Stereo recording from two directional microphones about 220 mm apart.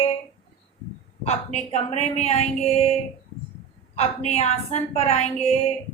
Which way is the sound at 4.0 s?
30° left (ahead or behind).